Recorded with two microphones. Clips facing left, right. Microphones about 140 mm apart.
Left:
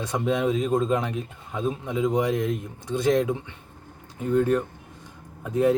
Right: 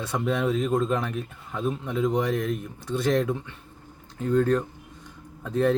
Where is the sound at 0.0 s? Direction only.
15° left (ahead or behind).